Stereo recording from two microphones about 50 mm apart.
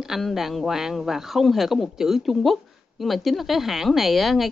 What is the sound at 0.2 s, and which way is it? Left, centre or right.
Speech, centre.